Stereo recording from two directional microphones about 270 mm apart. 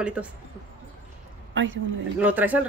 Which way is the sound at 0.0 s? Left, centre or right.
Centre.